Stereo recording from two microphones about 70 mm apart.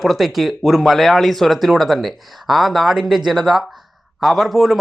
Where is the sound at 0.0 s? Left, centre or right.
Centre.